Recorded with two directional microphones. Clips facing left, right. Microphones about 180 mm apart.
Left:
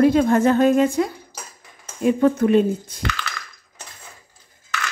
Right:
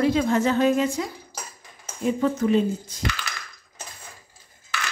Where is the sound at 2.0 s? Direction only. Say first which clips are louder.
Left 5 dB; 60° left (ahead or behind).